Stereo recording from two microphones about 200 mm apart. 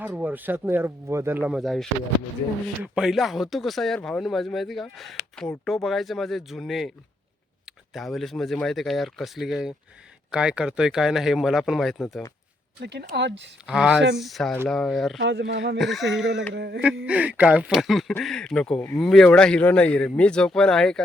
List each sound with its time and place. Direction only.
0.0 s speech: 10° right (ahead or behind)
12.8 s speech: 55° right (ahead or behind)
13.7 s speech: 5° right (ahead or behind)
15.2 s speech: 60° right (ahead or behind)
15.8 s speech: centre (ahead or behind)
16.6 s speech: 55° right (ahead or behind)
17.1 s speech: 5° right (ahead or behind)